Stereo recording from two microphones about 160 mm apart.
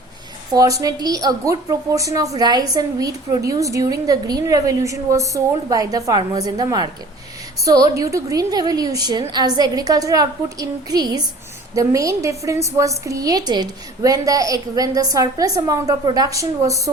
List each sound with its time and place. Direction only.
0.5 s a woman's voice: 20° right (ahead or behind)